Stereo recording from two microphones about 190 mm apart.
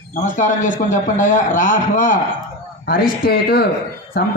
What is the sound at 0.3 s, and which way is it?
A man's voice, 40° left (ahead or behind).